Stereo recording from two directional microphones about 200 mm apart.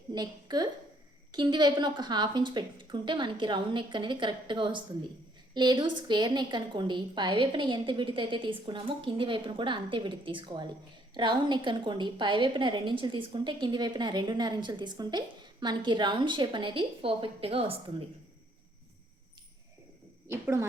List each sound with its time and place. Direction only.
0.1 s a woman's voice: 20° right (ahead or behind)
20.2 s a woman's voice: 10° right (ahead or behind)